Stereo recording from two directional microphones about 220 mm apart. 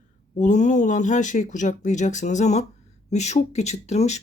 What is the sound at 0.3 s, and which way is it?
Speech, 35° left (ahead or behind).